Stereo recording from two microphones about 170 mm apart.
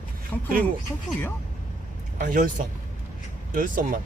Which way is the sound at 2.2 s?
55° right (ahead or behind).